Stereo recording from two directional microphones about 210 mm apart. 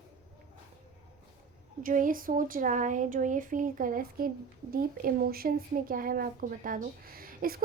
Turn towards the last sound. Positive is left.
turn(degrees=-45)  # may be behind; listen again after turning